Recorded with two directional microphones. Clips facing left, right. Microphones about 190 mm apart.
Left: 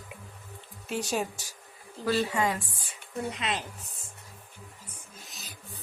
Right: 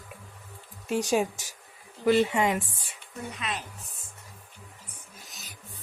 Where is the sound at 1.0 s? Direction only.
15° right (ahead or behind).